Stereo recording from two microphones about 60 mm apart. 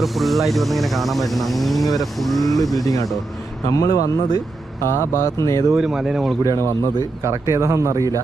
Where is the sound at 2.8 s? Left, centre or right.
Left.